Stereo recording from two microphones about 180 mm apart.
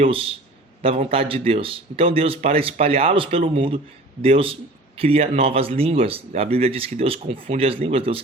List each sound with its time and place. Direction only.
0.0 s speech: 30° right (ahead or behind)